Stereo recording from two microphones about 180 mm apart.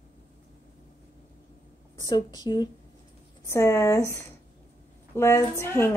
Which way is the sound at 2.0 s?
20° left (ahead or behind).